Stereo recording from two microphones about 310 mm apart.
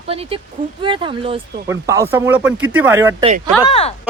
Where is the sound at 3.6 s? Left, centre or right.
Centre.